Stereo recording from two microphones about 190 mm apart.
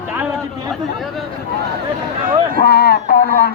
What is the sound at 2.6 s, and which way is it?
Speech, 60° left (ahead or behind).